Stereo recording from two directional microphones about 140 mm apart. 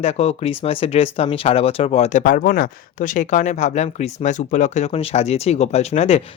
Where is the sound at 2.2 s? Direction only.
80° left.